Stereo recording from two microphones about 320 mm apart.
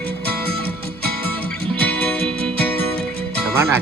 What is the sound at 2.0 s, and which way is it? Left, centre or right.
Music, centre.